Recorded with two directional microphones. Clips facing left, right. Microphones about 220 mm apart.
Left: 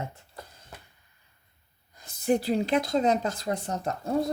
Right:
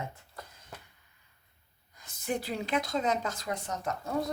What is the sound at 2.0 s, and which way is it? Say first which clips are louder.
Speech: left 8 dB; 35° left (ahead or behind).